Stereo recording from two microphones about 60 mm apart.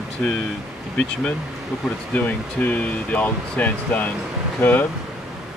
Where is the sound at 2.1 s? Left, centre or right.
Left.